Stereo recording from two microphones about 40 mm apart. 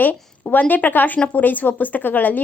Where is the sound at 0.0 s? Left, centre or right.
Left.